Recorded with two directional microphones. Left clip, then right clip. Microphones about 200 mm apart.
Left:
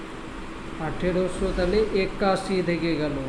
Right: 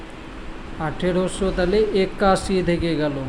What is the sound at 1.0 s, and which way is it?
A man's voice, 45° right (ahead or behind).